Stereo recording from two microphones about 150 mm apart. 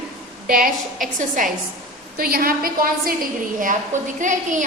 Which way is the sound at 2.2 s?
80° right.